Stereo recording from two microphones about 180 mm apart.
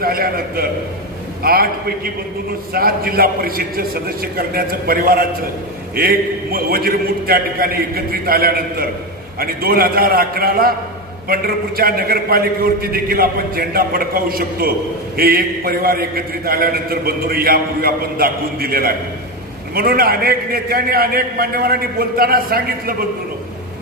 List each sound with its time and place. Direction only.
0.0 s a man's voice: 55° right (ahead or behind)